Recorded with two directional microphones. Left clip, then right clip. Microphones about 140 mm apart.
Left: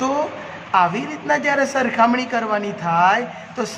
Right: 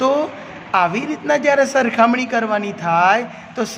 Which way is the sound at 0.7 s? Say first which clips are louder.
Even; 30° right (ahead or behind).